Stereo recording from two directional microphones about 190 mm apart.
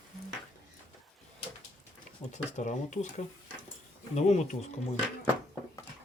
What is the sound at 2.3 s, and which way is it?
Speech, 40° left (ahead or behind).